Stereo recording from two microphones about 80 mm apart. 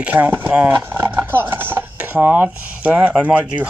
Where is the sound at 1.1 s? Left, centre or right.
Right.